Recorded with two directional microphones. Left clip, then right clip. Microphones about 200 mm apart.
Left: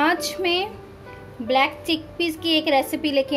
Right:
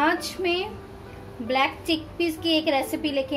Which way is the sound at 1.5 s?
20° left (ahead or behind).